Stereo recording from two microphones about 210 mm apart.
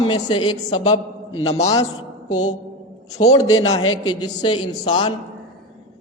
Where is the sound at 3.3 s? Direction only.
80° left.